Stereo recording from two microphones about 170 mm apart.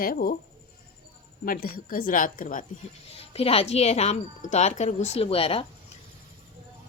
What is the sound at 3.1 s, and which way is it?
Speech, 35° left (ahead or behind).